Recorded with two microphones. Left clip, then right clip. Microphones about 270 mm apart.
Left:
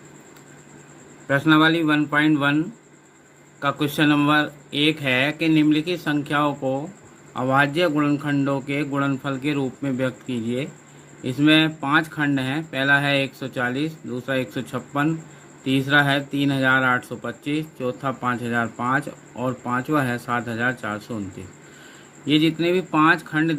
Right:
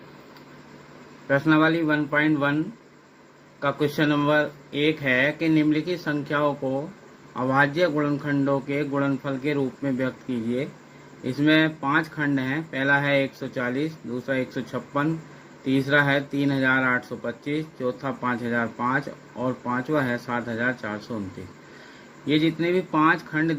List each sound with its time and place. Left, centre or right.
1.3 s speech: left
3.6 s speech: left
22.4 s speech: left